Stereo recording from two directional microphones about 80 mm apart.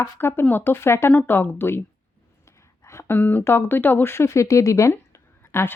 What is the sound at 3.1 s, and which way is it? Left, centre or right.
A woman's voice, left.